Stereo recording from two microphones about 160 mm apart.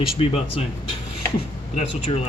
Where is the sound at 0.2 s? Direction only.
35° left (ahead or behind).